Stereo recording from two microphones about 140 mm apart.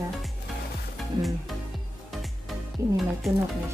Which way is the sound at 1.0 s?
Centre (ahead or behind).